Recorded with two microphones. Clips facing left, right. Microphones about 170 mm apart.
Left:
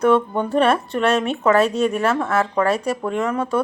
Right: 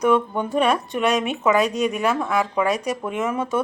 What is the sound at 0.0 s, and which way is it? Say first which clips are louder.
A woman's voice: left 2 dB; 15° right (ahead or behind).